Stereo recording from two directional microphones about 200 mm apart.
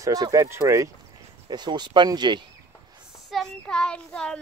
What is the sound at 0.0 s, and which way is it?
Speech, 15° right (ahead or behind).